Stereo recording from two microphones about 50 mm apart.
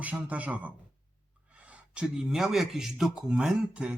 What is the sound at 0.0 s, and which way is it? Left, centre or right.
Speech, right.